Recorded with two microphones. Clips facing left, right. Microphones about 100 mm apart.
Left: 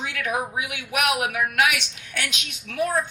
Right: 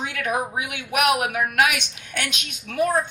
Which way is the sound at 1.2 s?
30° right (ahead or behind).